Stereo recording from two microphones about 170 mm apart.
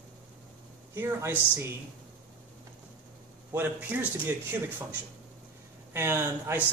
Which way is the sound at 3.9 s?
10° right (ahead or behind).